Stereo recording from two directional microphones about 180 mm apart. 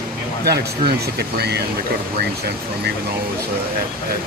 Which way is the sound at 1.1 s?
65° right (ahead or behind).